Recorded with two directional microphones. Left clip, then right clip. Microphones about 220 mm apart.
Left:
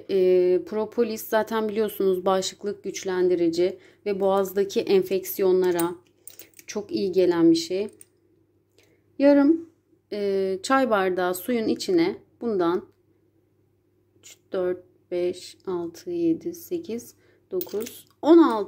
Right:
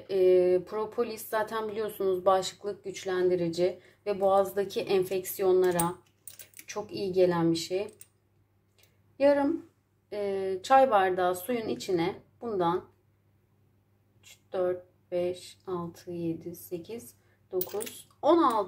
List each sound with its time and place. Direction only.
0.0 s speech: 45° left (ahead or behind)
8.7 s a sound: 45° left (ahead or behind)
10.0 s speech: 50° left (ahead or behind)
14.2 s speech: 50° left (ahead or behind)
18.2 s speech: 45° left (ahead or behind)